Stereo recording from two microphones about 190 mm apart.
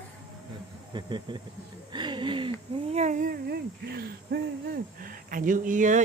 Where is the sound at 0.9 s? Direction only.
25° right (ahead or behind).